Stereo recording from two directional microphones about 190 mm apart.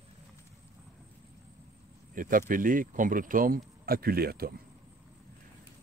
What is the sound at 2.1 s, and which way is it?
Speech, 45° right (ahead or behind).